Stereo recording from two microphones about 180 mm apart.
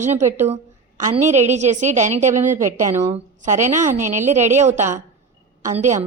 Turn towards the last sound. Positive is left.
turn(degrees=-40)  # may be behind; listen again after turning